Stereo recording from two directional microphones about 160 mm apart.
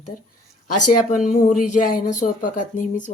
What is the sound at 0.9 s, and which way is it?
Speech, 50° left (ahead or behind).